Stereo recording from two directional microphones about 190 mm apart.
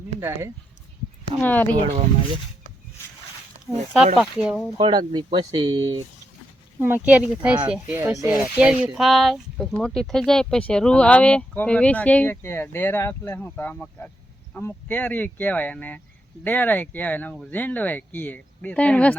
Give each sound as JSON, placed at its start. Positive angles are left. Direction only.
{"t": 0.2, "sound": "speech", "side_deg": -10}
{"t": 1.4, "sound": "speech", "side_deg": 10}
{"t": 3.7, "sound": "speech", "side_deg": 0}
{"t": 4.8, "sound": "speech", "side_deg": -25}
{"t": 6.7, "sound": "speech", "side_deg": -10}